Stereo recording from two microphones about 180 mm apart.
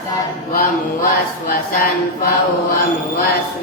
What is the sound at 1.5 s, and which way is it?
Speech, 55° left (ahead or behind).